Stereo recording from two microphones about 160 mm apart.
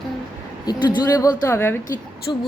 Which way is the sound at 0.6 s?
25° left (ahead or behind).